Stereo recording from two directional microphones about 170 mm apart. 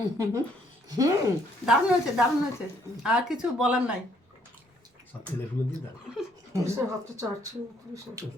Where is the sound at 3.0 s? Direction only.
5° right (ahead or behind).